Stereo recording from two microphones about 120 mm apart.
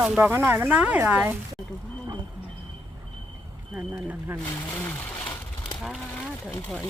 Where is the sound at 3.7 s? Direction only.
20° right (ahead or behind).